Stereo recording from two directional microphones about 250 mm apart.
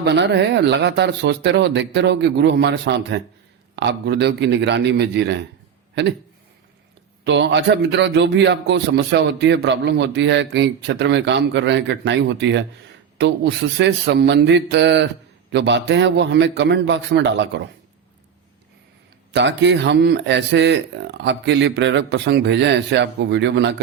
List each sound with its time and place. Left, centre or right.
0.0 s a man's voice: right
7.3 s a man's voice: right
19.3 s a man's voice: right